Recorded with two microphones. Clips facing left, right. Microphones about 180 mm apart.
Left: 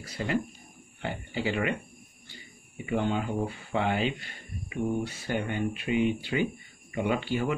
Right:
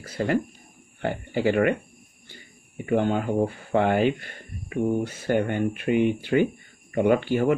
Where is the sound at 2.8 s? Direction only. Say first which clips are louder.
Right 5 dB; 50° right (ahead or behind).